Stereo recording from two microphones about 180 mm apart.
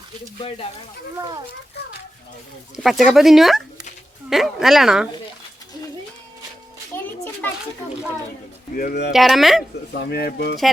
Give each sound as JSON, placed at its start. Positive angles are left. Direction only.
{"t": 2.7, "sound": "speech", "side_deg": 0}
{"t": 8.7, "sound": "speech", "side_deg": 50}
{"t": 9.1, "sound": "speech", "side_deg": 0}
{"t": 9.9, "sound": "speech", "side_deg": 65}